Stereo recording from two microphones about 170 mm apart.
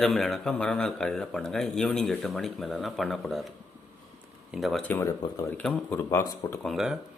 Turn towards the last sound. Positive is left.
turn(degrees=0)  # may be behind; listen again after turning